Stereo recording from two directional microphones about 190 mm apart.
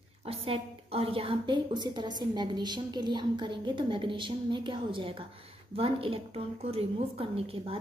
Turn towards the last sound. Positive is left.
turn(degrees=-30)  # may be behind; listen again after turning